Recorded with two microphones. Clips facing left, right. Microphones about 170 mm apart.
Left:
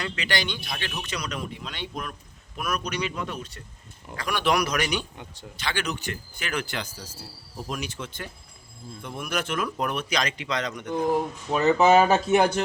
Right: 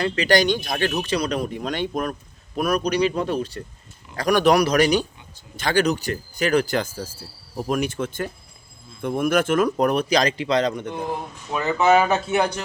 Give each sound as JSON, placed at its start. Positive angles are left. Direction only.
{"t": 0.0, "sound": "speech", "side_deg": -40}
{"t": 1.0, "sound": "speech", "side_deg": -30}
{"t": 2.6, "sound": "speech", "side_deg": -35}
{"t": 11.6, "sound": "speech", "side_deg": 30}